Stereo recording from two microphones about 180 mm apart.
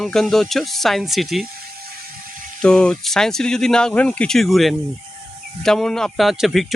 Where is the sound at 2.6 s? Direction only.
5° left (ahead or behind).